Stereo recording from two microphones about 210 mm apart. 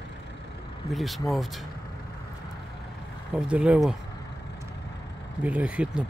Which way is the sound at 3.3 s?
5° right (ahead or behind).